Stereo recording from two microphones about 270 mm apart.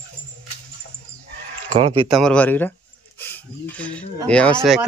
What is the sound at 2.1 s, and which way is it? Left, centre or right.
Speech, centre.